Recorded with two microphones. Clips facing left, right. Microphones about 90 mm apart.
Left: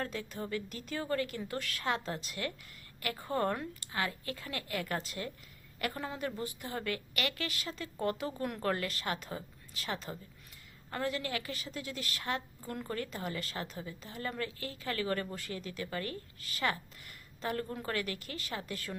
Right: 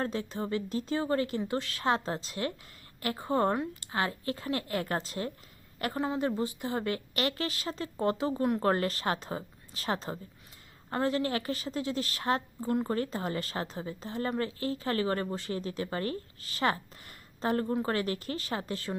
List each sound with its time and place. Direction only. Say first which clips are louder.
0.0 s a woman's voice: right 5 dB; 30° right (ahead or behind)